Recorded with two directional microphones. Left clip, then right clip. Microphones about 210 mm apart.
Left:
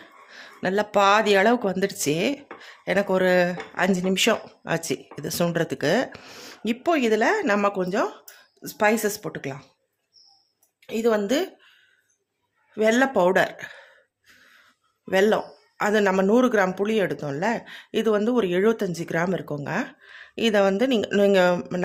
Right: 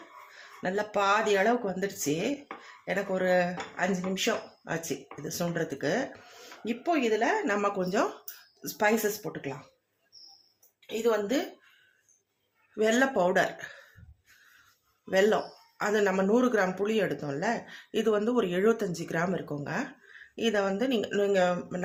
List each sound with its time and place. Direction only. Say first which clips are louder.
0.3 s speech: left 7 dB; 40° left (ahead or behind)
10.8 s a woman's voice: left 5 dB; 55° left (ahead or behind)
12.7 s speech: left 5 dB; 35° left (ahead or behind)
15.1 s speech: left 4 dB; 35° left (ahead or behind)